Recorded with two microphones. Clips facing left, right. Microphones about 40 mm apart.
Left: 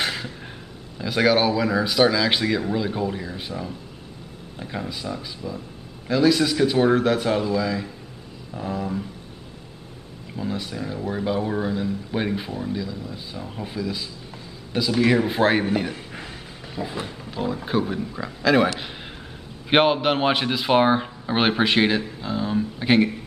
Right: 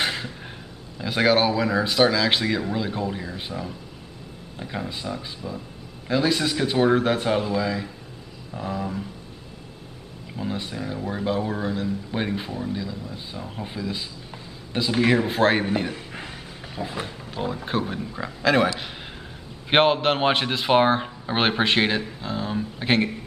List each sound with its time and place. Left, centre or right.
0.0 s a sound: centre
0.9 s a man's voice: centre
4.6 s a man's voice: centre
10.3 s a man's voice: centre
12.7 s speech: centre
14.7 s a man's voice: centre
15.0 s a man's voice: centre
19.7 s a man's voice: centre